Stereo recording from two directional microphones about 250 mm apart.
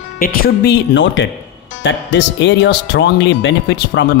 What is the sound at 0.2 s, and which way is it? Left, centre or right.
Speech, left.